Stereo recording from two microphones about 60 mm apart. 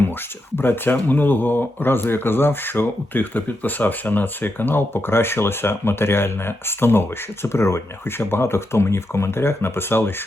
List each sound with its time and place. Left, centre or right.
0.5 s speech: left